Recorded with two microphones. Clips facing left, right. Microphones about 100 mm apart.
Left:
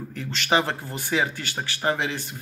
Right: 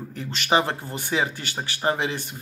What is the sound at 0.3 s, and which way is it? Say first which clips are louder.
Speech: right 1 dB; 20° right (ahead or behind).